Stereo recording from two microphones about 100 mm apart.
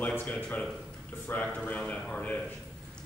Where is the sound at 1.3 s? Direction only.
15° left (ahead or behind).